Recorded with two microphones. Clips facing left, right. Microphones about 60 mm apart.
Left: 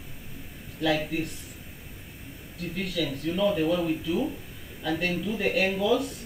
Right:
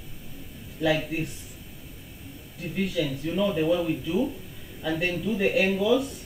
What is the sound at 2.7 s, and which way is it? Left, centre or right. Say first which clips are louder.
Speech: right 3 dB; centre.